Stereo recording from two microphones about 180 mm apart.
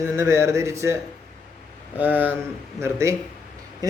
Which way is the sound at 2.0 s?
10° right (ahead or behind).